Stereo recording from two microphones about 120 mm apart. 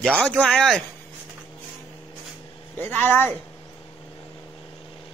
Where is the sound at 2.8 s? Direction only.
15° left (ahead or behind).